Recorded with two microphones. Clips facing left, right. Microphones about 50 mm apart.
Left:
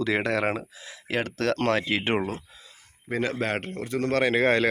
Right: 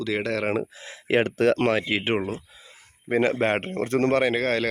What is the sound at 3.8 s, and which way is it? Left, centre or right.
Speech, right.